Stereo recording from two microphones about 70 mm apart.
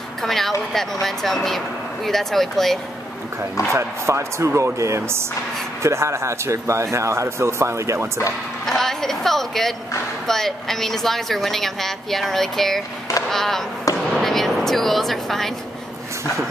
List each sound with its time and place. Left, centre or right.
0.2 s a woman's voice: centre
3.7 s speech: right
8.6 s a woman's voice: centre